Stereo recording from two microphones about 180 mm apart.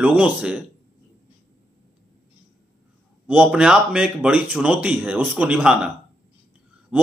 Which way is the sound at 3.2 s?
10° right (ahead or behind).